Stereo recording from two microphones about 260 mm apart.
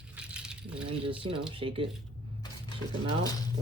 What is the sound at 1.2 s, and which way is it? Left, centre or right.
Speech, centre.